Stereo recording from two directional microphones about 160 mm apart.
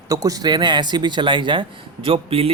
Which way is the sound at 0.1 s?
20° right (ahead or behind).